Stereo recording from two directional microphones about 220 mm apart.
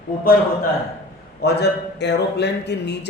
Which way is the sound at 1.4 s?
50° left (ahead or behind).